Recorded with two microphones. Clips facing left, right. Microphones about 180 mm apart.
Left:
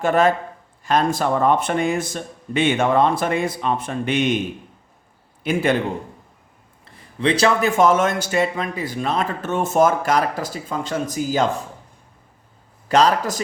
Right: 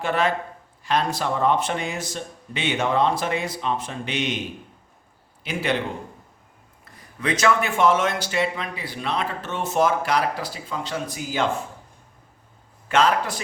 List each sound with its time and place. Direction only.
0.0 s speech: 45° left (ahead or behind)
5.4 s a man's voice: 50° left (ahead or behind)
6.8 s speech: 30° left (ahead or behind)
12.9 s a man's voice: 40° left (ahead or behind)